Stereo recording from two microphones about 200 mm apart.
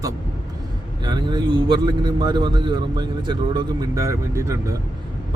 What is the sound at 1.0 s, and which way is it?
Speech, 20° right (ahead or behind).